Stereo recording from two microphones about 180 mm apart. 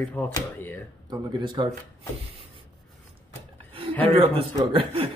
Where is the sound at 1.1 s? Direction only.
25° right (ahead or behind).